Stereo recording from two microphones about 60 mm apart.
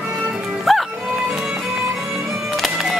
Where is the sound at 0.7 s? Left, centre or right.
Centre.